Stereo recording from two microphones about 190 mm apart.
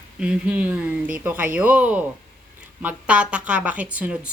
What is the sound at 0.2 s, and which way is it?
A woman's voice, 5° right (ahead or behind).